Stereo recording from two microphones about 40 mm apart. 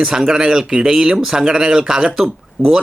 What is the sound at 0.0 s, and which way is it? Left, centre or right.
Speech, centre.